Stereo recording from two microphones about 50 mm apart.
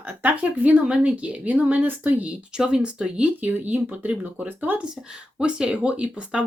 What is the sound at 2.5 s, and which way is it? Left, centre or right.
Speech, centre.